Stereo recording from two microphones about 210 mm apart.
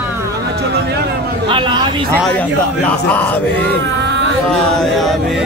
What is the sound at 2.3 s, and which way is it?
Speech, 5° left (ahead or behind).